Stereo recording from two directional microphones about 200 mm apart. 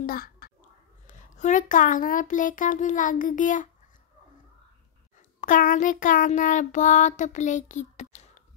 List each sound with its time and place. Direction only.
0.0 s a sound: 45° left (ahead or behind)
1.0 s child singing: 40° left (ahead or behind)
5.4 s child singing: 40° left (ahead or behind)